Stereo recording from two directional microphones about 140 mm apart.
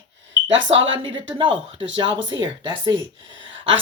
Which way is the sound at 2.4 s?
35° right (ahead or behind).